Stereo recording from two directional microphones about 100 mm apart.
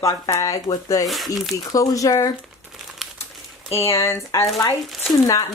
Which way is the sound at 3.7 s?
30° left (ahead or behind).